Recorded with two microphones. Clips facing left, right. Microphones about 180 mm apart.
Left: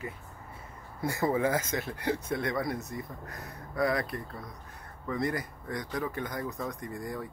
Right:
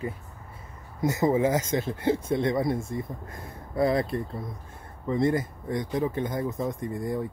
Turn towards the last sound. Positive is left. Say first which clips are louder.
# right 7 dB
turn(degrees=-25)  # may be behind; listen again after turning